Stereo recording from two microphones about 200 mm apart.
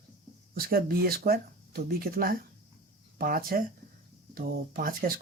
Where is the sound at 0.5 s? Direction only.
45° right (ahead or behind).